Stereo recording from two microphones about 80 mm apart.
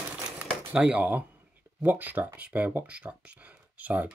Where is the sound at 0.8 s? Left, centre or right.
Centre.